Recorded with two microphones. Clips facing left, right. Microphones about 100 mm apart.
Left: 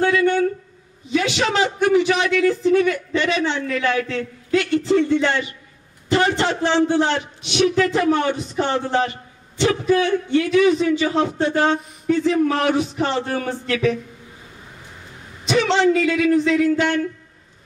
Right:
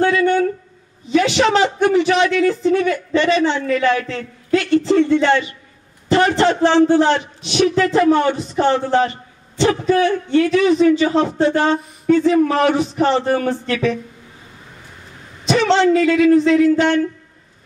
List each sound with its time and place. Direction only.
0.0 s a sound: 40° right (ahead or behind)
1.1 s a man's voice: 35° right (ahead or behind)
15.4 s a man's voice: 35° right (ahead or behind)